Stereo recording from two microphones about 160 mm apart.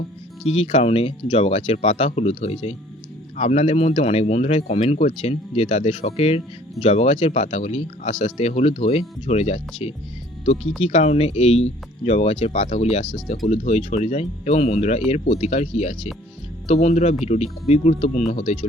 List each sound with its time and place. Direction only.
0.4 s speech: 40° left (ahead or behind)
1.4 s speech: 45° left (ahead or behind)
10.6 s speech: centre (ahead or behind)
10.8 s speech: 45° left (ahead or behind)